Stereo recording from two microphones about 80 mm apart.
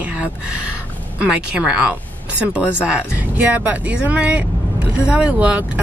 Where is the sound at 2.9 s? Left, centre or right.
Right.